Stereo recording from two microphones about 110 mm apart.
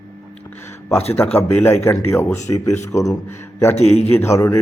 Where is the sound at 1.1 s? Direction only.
20° left (ahead or behind).